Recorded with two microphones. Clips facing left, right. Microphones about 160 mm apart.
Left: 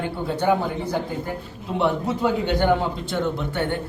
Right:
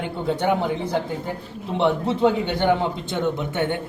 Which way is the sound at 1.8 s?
25° right (ahead or behind).